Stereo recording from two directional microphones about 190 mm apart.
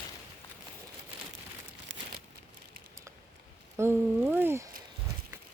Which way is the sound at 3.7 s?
10° right (ahead or behind).